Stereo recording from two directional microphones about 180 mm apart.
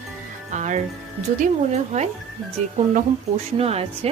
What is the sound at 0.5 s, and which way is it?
A woman's voice, 40° right (ahead or behind).